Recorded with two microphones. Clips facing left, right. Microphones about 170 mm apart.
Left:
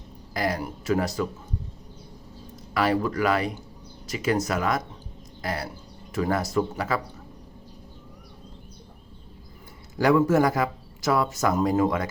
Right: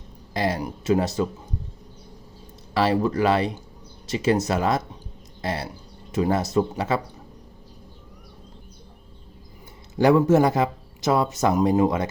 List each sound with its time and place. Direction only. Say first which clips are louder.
0.3 s speech: right 2 dB; 25° right (ahead or behind)
2.7 s speech: right 3 dB; 25° right (ahead or behind)
10.0 s speech: right 3 dB; 25° right (ahead or behind)